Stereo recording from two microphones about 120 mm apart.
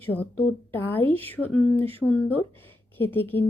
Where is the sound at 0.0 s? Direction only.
15° left (ahead or behind).